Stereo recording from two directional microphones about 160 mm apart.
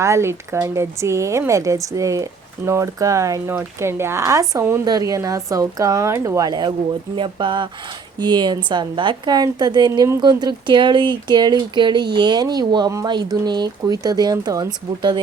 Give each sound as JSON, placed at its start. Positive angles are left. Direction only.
{"t": 0.0, "sound": "a woman's voice", "side_deg": -15}